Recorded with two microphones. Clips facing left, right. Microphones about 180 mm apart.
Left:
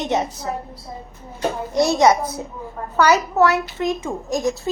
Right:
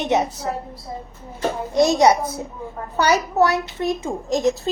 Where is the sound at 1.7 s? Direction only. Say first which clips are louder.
Right 2 dB; 15° right (ahead or behind).